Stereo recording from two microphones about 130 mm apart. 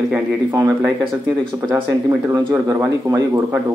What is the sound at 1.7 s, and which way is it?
Speech, 15° right (ahead or behind).